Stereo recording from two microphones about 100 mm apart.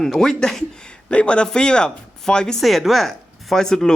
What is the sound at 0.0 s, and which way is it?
A man's voice, 5° left (ahead or behind).